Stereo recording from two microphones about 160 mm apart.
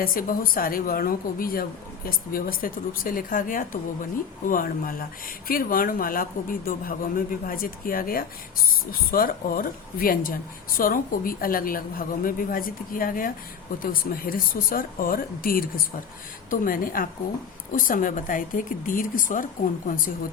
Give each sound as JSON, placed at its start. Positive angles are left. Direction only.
{"t": 0.0, "sound": "speech", "side_deg": 60}